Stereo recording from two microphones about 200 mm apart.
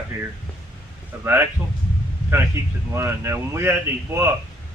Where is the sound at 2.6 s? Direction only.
15° right (ahead or behind).